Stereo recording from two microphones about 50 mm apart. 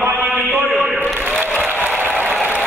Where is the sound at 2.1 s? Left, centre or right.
Right.